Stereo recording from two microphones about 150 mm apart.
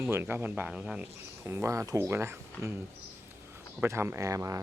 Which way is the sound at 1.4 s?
20° right (ahead or behind).